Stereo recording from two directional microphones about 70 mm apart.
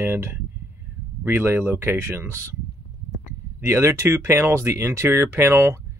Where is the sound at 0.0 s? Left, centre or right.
Right.